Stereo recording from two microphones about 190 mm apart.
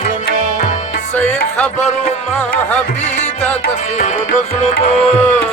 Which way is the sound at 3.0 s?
35° left (ahead or behind).